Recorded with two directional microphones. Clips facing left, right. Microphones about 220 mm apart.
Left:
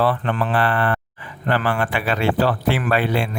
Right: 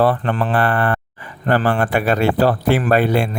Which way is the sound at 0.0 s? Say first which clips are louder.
Right 3 dB; 45° right (ahead or behind).